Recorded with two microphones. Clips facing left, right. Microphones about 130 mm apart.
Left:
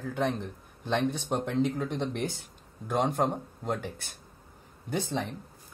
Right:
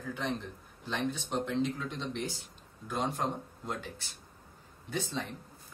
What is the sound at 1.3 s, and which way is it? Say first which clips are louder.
Speech: left 3 dB; 55° left (ahead or behind).